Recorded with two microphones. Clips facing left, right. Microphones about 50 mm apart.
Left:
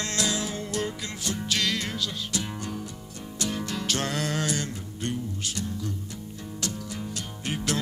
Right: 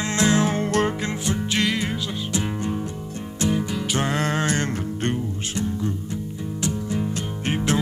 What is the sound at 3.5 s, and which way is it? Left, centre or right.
Music, centre.